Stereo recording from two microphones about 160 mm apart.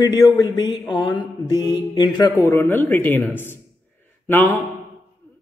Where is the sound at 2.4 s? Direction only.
15° left (ahead or behind).